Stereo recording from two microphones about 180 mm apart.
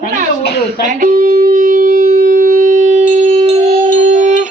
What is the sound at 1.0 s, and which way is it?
Music, 50° right (ahead or behind).